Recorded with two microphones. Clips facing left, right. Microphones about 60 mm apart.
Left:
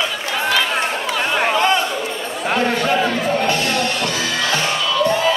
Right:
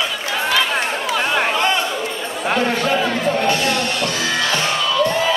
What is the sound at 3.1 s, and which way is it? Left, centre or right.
Music, centre.